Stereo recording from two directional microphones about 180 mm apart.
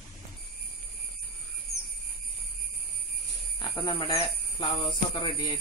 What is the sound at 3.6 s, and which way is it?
Speech, 25° left (ahead or behind).